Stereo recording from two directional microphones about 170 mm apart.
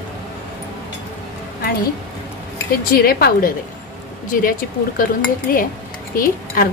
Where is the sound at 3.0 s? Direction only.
60° left (ahead or behind).